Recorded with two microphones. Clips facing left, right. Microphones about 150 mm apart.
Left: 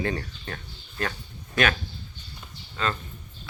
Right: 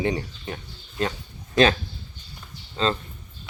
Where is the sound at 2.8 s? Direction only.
30° right (ahead or behind).